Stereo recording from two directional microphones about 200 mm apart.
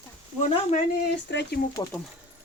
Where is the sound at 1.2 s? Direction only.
60° left (ahead or behind).